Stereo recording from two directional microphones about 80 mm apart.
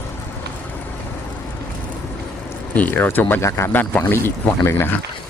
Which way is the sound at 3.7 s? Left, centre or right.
Left.